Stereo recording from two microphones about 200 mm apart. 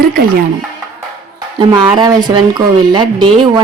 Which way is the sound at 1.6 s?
20° right (ahead or behind).